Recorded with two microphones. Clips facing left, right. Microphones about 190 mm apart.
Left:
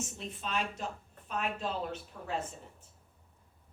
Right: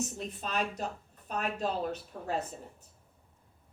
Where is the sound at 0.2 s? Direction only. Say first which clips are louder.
Right 2 dB; 40° right (ahead or behind).